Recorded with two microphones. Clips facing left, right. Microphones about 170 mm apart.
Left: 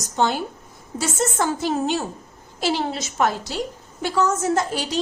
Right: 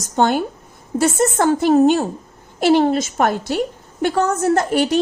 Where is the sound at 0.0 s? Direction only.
55° right (ahead or behind).